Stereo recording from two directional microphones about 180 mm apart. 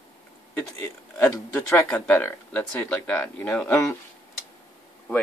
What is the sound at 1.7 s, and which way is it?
Speech, 10° left (ahead or behind).